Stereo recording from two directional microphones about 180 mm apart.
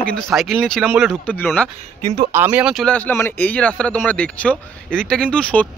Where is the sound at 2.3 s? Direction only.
10° right (ahead or behind).